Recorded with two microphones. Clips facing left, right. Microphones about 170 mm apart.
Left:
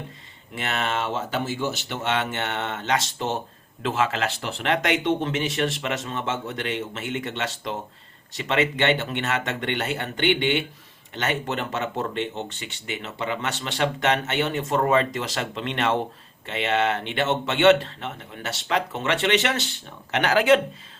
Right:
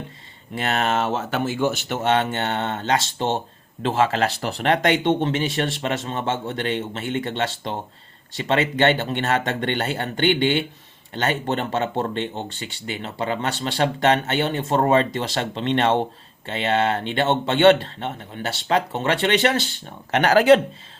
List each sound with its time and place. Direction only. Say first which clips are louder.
0.5 s speech: right 5 dB; 40° right (ahead or behind)